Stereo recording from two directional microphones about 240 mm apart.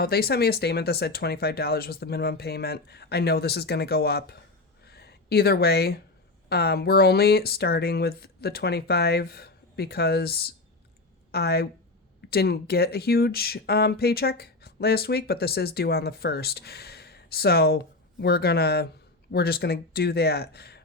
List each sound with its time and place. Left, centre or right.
0.0 s speech: left
4.9 s a sound: left
6.5 s speech: left